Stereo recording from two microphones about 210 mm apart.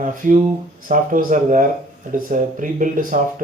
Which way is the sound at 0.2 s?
35° right (ahead or behind).